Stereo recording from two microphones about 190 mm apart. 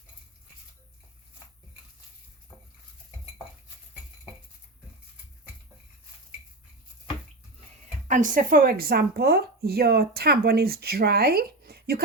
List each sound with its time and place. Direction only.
2.5 s stir: 5° right (ahead or behind)
8.0 s speech: 45° right (ahead or behind)